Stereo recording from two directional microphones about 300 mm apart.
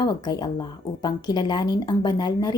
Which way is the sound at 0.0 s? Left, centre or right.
Centre.